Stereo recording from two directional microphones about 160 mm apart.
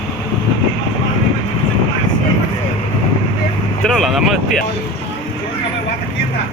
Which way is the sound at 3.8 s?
Centre (ahead or behind).